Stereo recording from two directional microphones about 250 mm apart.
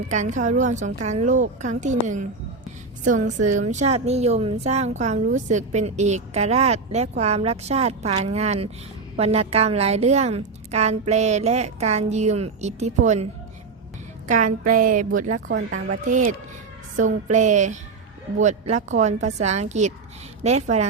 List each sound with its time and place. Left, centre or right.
0.1 s a woman's voice: right
14.3 s speech: right
17.3 s a woman's voice: right